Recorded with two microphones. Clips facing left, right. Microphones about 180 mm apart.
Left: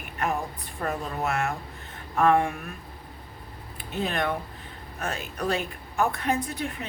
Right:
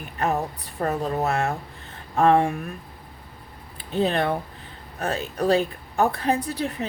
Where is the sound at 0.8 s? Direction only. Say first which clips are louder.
Right 5 dB; 35° right (ahead or behind).